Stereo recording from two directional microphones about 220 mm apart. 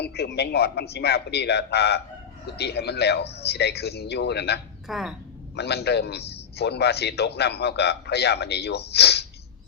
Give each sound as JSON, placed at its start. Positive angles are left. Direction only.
{"t": 0.0, "sound": "a man's voice", "side_deg": 50}
{"t": 4.9, "sound": "speech", "side_deg": 0}
{"t": 5.5, "sound": "a man's voice", "side_deg": 50}